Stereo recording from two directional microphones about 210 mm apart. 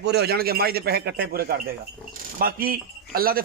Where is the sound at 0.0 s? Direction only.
50° right (ahead or behind).